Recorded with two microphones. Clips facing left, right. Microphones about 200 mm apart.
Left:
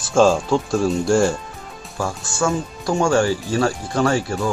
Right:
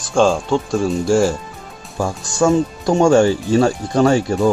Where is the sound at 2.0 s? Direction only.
15° right (ahead or behind).